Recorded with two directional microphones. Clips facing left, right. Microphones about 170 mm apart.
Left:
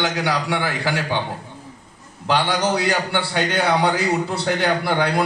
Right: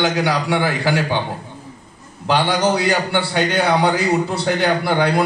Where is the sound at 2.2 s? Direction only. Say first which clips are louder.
Right 3 dB; 15° right (ahead or behind).